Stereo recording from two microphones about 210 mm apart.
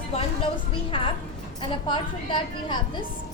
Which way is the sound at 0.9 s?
25° left (ahead or behind).